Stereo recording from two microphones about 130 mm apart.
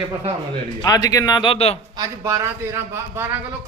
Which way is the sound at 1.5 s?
50° left (ahead or behind).